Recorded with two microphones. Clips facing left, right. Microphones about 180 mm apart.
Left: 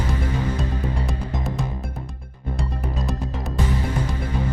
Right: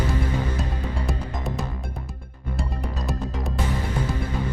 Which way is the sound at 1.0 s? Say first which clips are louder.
Left 1 dB; centre (ahead or behind).